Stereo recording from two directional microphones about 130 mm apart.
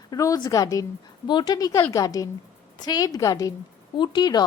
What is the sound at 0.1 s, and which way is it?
A woman's voice, 30° left (ahead or behind).